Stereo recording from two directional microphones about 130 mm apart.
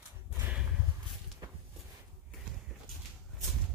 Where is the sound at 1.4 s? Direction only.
30° right (ahead or behind).